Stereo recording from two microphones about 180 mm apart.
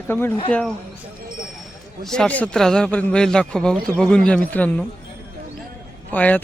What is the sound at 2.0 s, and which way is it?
A man's voice, 5° left (ahead or behind).